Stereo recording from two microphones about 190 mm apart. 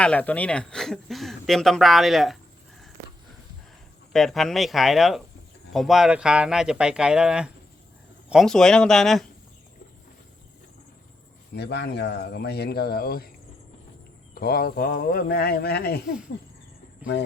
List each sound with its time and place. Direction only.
0.0 s speech: 5° left (ahead or behind)
4.1 s speech: centre (ahead or behind)
11.5 s speech: 60° left (ahead or behind)
14.3 s speech: 50° left (ahead or behind)